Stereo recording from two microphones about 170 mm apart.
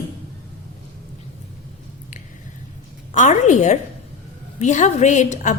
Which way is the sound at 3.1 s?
45° left (ahead or behind).